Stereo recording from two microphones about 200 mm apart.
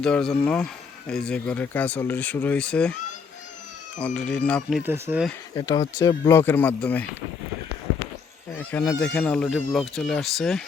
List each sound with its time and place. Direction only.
0.0 s speech: 5° left (ahead or behind)
3.9 s speech: 5° left (ahead or behind)
4.8 s speech: 10° right (ahead or behind)
5.5 s speech: 20° left (ahead or behind)
8.5 s speech: 10° left (ahead or behind)